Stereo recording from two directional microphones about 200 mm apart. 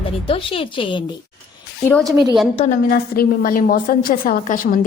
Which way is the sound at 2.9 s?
45° left (ahead or behind).